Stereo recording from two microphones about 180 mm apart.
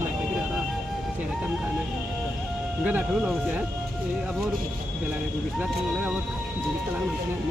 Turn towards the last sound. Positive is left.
turn(degrees=-5)  # may be behind; listen again after turning